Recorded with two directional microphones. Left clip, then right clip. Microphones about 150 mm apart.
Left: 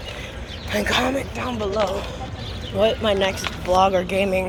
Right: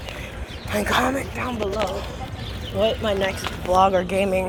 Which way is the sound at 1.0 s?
10° left (ahead or behind).